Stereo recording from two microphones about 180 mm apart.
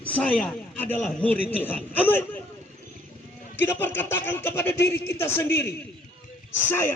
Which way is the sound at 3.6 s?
10° left (ahead or behind).